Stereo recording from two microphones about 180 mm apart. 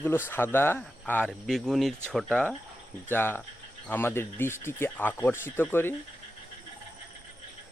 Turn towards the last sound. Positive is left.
turn(degrees=10)  # may be behind; listen again after turning